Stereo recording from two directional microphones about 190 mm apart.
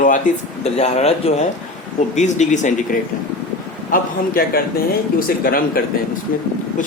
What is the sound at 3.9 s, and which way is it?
Speech, 50° left (ahead or behind).